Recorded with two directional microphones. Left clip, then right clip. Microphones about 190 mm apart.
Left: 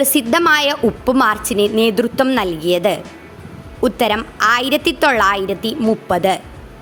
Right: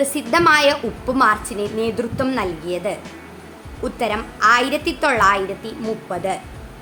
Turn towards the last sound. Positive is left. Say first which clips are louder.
# left 8 dB
turn(degrees=50)  # may be behind; listen again after turning